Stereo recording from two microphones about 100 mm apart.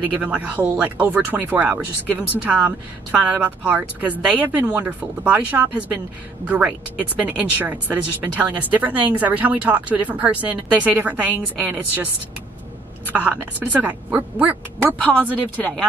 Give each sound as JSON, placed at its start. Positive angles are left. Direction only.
{"t": 0.0, "sound": "speech", "side_deg": -15}
{"t": 13.1, "sound": "speech", "side_deg": -15}
{"t": 15.0, "sound": "speech", "side_deg": 15}